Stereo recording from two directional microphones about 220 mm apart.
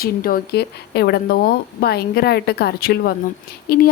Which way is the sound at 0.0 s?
40° left (ahead or behind).